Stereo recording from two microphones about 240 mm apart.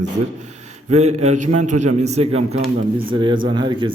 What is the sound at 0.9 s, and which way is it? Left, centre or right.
Speech, right.